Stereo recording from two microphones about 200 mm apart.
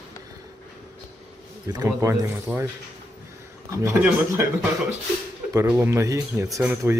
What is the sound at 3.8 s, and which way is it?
Speech, 15° right (ahead or behind).